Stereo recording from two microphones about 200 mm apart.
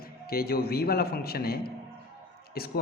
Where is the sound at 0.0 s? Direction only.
50° left (ahead or behind).